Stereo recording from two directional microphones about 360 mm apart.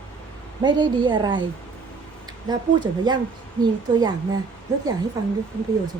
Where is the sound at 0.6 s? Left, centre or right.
Centre.